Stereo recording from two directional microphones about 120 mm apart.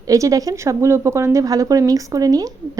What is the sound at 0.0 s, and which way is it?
A woman's voice, 30° right (ahead or behind).